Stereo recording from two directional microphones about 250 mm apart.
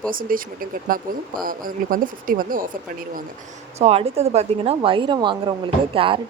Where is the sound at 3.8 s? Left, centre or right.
Right.